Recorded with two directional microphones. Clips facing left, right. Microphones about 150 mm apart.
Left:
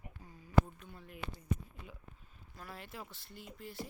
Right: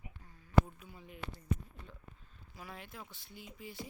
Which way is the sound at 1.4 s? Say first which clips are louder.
Right 1 dB; 10° left (ahead or behind).